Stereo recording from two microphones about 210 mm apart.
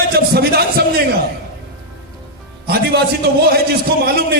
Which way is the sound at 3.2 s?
45° right (ahead or behind).